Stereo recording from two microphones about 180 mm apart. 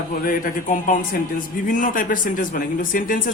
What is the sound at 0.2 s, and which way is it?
Speech, 50° left (ahead or behind).